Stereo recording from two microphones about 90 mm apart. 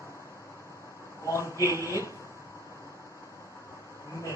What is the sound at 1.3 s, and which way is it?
Speech, 35° left (ahead or behind).